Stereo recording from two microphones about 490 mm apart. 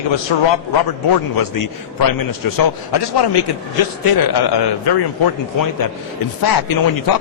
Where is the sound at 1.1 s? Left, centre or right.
Left.